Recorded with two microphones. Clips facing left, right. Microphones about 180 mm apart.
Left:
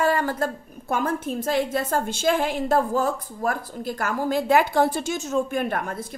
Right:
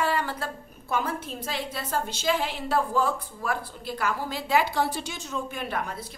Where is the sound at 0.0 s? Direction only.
45° left (ahead or behind).